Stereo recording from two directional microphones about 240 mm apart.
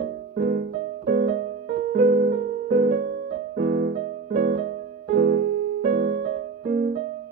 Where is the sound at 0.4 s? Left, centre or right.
Right.